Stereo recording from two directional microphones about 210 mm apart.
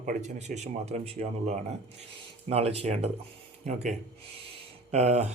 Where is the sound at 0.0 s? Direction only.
35° right (ahead or behind).